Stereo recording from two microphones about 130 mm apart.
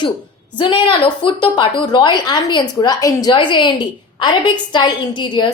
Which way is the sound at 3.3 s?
40° left (ahead or behind).